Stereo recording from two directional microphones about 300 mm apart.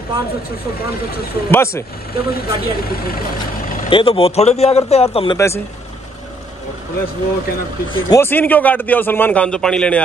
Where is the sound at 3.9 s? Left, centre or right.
Centre.